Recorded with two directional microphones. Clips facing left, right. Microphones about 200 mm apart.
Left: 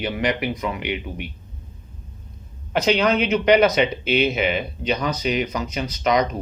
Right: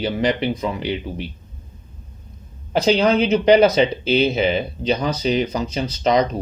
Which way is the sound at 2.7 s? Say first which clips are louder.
Right 3 dB; 30° right (ahead or behind).